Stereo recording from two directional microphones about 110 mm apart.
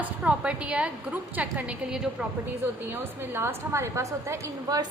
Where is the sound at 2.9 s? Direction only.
20° right (ahead or behind).